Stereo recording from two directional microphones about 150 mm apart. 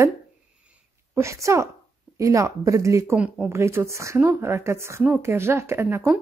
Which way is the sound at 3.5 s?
20° right (ahead or behind).